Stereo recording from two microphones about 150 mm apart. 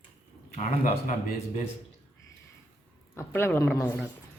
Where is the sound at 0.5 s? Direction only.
60° left (ahead or behind).